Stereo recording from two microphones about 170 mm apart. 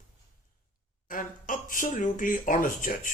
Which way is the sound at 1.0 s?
55° left (ahead or behind).